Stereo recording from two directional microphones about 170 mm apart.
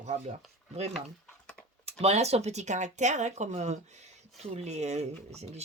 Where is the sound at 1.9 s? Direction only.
40° right (ahead or behind).